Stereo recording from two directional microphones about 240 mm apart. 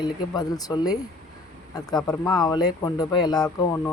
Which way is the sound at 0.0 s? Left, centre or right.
Centre.